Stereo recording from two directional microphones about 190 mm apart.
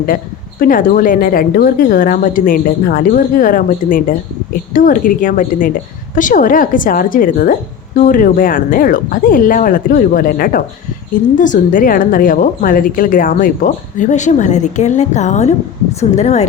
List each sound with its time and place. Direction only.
0.6 s a woman's voice: 45° left (ahead or behind)